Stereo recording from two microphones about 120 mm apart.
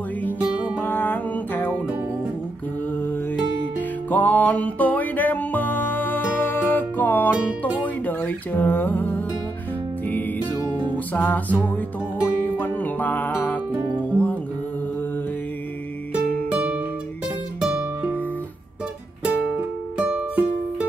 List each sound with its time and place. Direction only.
0.4 s music: 15° right (ahead or behind)
0.7 s music: 15° left (ahead or behind)
4.1 s music: 15° left (ahead or behind)
11.1 s music: 15° left (ahead or behind)
13.7 s music: 15° right (ahead or behind)
16.1 s music: 15° right (ahead or behind)
20.0 s music: 10° right (ahead or behind)